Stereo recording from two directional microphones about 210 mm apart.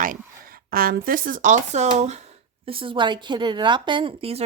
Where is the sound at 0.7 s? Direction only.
45° right (ahead or behind).